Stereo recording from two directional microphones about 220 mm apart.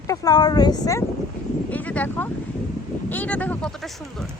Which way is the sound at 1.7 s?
5° left (ahead or behind).